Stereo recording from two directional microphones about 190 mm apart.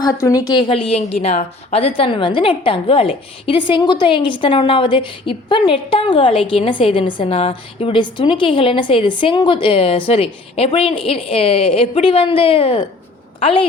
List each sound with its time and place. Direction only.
0.0 s a woman's voice: 15° left (ahead or behind)